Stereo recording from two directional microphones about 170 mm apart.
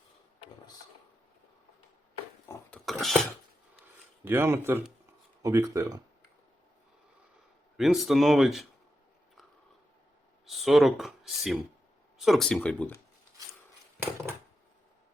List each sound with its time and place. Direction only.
2.5 s a sound: 5° left (ahead or behind)
4.2 s speech: 15° right (ahead or behind)
7.8 s speech: centre (ahead or behind)
10.4 s speech: centre (ahead or behind)